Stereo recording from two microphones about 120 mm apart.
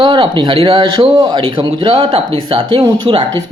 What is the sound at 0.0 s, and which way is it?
Speech, 45° right (ahead or behind).